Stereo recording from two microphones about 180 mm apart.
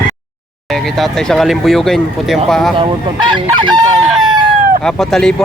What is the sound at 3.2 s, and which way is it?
Chicken, 25° right (ahead or behind).